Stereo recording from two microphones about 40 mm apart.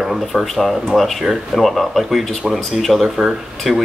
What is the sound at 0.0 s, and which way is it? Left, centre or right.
Speech, centre.